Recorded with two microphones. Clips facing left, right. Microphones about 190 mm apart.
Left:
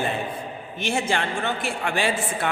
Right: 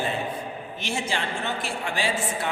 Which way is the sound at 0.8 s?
55° left (ahead or behind).